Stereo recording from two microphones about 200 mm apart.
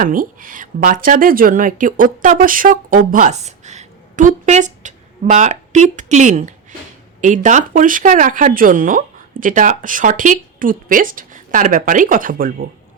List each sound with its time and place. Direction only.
0.0 s a woman's voice: 45° right (ahead or behind)